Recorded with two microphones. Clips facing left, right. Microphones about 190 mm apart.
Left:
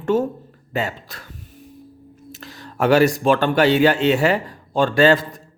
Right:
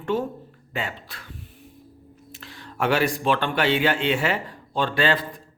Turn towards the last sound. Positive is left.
turn(degrees=45)  # may be behind; listen again after turning